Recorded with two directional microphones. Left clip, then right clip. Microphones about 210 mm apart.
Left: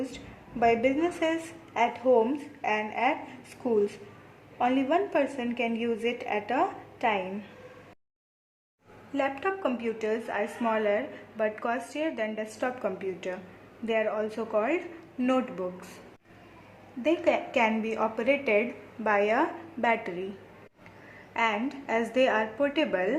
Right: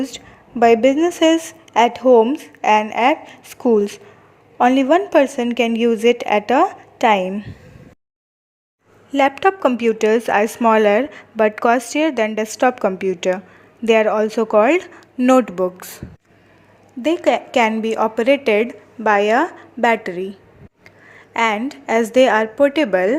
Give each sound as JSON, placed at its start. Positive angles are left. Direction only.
{"t": 0.6, "sound": "speech", "side_deg": -35}
{"t": 9.1, "sound": "speech", "side_deg": -40}
{"t": 17.0, "sound": "speech", "side_deg": -35}
{"t": 21.3, "sound": "speech", "side_deg": -35}